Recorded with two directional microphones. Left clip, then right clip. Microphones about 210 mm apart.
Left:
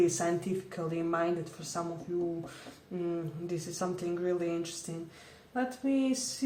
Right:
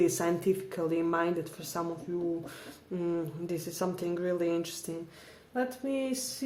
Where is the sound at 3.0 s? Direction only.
45° right (ahead or behind).